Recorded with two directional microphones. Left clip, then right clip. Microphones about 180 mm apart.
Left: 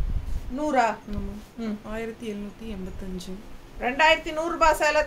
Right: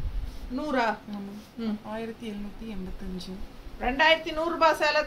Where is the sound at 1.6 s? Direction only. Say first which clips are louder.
Left 2 dB; 30° left (ahead or behind).